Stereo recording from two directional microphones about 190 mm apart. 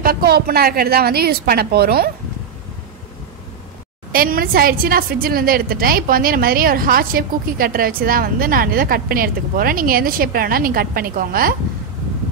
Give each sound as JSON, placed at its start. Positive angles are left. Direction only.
{"t": 0.0, "sound": "a woman's voice", "side_deg": -55}
{"t": 4.1, "sound": "a woman's voice", "side_deg": -50}